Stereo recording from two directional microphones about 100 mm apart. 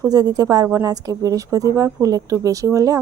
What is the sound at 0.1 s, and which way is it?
Speech, 40° right (ahead or behind).